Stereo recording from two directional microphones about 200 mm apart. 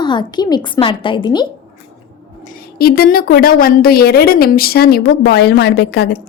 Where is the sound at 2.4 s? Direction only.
50° left (ahead or behind).